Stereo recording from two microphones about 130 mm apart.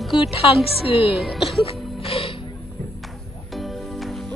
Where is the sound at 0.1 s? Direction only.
45° left (ahead or behind).